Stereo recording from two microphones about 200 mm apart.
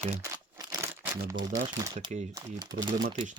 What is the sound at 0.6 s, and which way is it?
Crumpling, 10° right (ahead or behind).